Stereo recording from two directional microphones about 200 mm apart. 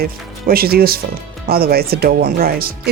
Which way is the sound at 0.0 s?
50° right (ahead or behind).